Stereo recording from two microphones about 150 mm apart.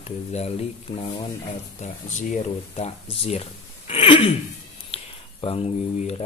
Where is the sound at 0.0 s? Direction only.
45° left (ahead or behind).